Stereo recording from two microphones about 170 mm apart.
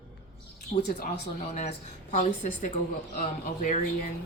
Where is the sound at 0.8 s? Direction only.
80° left.